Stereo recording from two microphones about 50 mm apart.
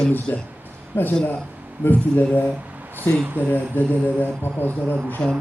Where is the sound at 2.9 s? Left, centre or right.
Right.